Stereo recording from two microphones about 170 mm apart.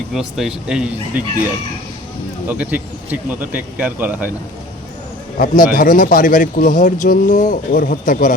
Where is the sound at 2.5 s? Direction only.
10° right (ahead or behind).